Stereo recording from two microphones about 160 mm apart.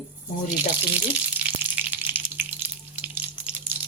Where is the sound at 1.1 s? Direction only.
10° right (ahead or behind).